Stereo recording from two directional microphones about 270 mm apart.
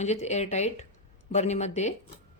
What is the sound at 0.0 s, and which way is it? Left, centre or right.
A woman's voice, left.